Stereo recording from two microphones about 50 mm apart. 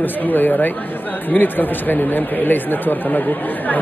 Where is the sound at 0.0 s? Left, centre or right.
Left.